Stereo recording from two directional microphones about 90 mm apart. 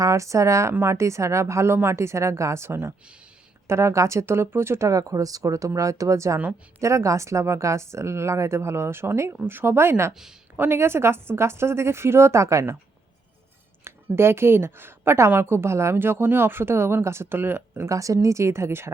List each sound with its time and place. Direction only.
0.0 s a woman's voice: 35° right (ahead or behind)
13.8 s a woman's voice: 25° right (ahead or behind)
17.8 s a woman's voice: 35° right (ahead or behind)